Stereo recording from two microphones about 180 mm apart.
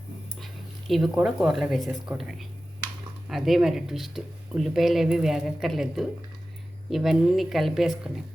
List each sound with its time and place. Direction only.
0.3 s speech: centre (ahead or behind)